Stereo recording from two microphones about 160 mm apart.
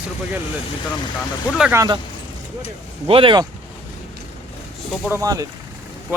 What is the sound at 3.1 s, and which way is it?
Speech, 35° right (ahead or behind).